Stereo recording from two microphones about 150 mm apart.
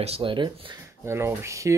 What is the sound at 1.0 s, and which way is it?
Speech, 15° right (ahead or behind).